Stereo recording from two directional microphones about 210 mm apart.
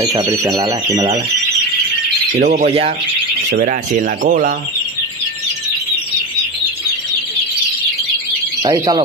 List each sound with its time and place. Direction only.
0.0 s speech: 15° right (ahead or behind)
2.3 s speech: 35° right (ahead or behind)
8.6 s speech: 20° right (ahead or behind)